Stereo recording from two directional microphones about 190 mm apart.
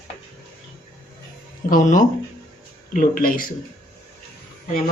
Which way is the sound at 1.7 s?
40° left (ahead or behind).